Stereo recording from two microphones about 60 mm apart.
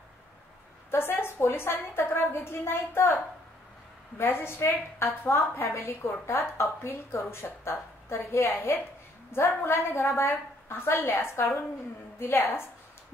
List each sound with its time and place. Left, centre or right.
0.9 s a woman's voice: left
4.2 s a woman's voice: left
12.2 s a woman's voice: left